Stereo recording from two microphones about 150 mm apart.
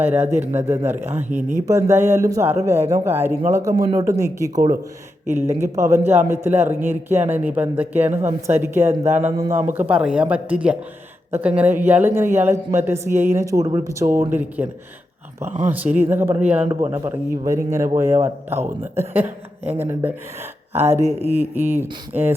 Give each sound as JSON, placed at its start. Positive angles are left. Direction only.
{"t": 0.0, "sound": "speech", "side_deg": -15}
{"t": 15.4, "sound": "speech", "side_deg": -55}
{"t": 15.7, "sound": "speech", "side_deg": -10}
{"t": 21.0, "sound": "speech", "side_deg": -45}
{"t": 21.3, "sound": "speech", "side_deg": -15}